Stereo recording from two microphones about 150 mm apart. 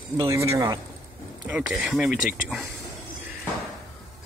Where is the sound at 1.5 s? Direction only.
10° right (ahead or behind).